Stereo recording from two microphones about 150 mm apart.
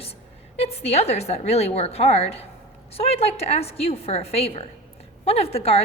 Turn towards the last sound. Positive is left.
turn(degrees=40)  # may be behind; listen again after turning